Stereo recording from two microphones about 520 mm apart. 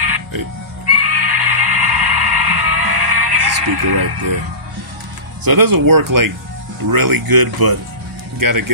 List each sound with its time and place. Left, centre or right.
0.0 s music: right
5.4 s speech: right